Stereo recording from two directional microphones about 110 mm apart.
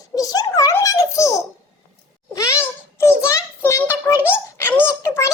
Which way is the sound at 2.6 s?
25° left (ahead or behind).